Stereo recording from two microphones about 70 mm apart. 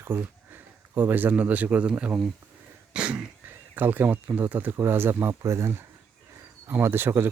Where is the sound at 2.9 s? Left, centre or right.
Centre.